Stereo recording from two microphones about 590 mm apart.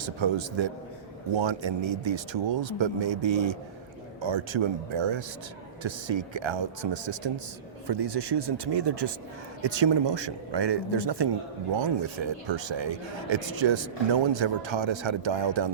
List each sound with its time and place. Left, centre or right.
0.2 s a man's voice: right